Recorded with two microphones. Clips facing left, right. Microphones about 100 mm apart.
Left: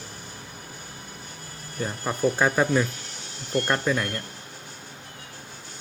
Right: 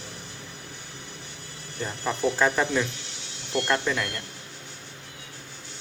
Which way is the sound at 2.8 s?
45° left (ahead or behind).